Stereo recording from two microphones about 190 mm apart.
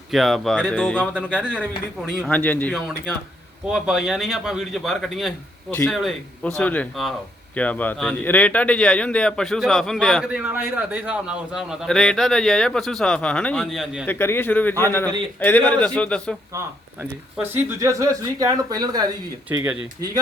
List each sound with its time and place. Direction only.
0.1 s speech: centre (ahead or behind)
3.7 s speech: 5° right (ahead or behind)
17.3 s speech: 10° right (ahead or behind)